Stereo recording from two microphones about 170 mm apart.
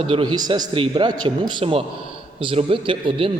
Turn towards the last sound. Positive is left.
turn(degrees=-30)  # may be behind; listen again after turning